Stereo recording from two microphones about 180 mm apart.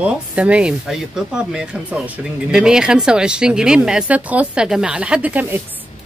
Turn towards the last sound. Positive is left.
turn(degrees=-10)  # may be behind; listen again after turning